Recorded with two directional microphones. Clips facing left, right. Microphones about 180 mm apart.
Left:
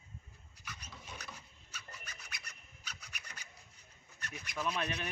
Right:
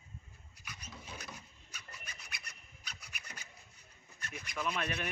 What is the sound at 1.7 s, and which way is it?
Rub, 10° right (ahead or behind).